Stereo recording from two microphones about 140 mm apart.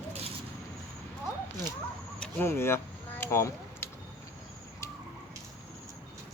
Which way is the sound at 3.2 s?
20° left (ahead or behind).